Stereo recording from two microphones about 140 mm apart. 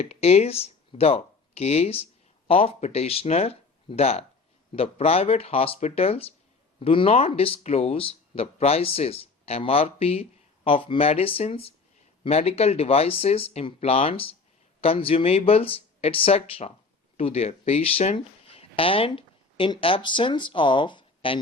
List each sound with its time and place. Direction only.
0.0 s speech: 45° left (ahead or behind)